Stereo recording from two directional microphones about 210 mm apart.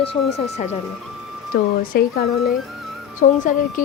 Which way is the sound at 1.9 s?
45° left (ahead or behind).